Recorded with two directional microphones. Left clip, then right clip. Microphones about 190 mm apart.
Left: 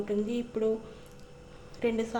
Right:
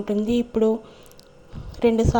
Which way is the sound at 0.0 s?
35° right (ahead or behind).